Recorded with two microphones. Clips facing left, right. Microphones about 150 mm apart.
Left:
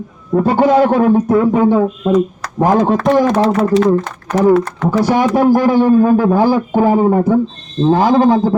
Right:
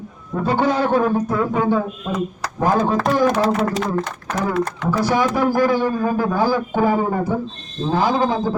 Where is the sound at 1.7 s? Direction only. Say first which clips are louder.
Left 7 dB; 35° left (ahead or behind).